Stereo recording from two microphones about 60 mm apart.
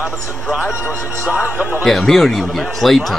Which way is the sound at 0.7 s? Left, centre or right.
Left.